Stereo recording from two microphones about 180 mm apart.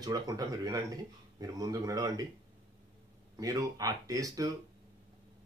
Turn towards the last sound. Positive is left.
turn(degrees=-20)  # may be behind; listen again after turning